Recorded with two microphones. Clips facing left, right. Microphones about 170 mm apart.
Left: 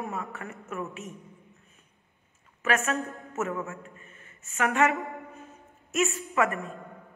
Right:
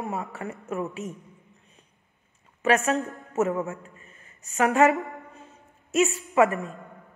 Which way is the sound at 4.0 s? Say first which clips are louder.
Left 1 dB; 35° right (ahead or behind).